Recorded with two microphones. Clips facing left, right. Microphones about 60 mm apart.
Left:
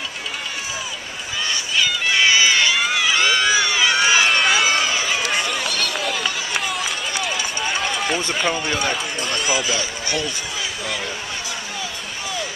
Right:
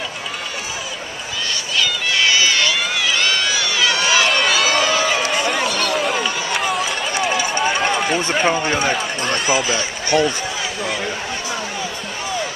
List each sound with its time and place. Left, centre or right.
1.8 s run: centre
4.3 s run: centre
8.2 s speech: right
8.7 s speech: centre
9.2 s speech: right